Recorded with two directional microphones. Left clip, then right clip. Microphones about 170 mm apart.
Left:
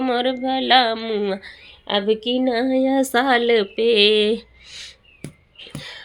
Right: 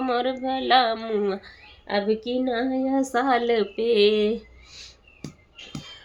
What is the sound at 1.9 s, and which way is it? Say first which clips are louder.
Female singing: left 4 dB; 35° left (ahead or behind).